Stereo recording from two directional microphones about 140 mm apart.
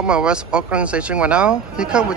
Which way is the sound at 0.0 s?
5° right (ahead or behind).